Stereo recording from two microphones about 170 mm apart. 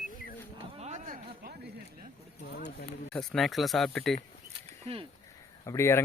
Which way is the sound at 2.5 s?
75° left (ahead or behind).